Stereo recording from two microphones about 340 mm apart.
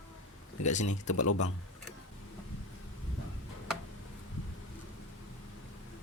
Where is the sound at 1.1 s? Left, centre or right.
Left.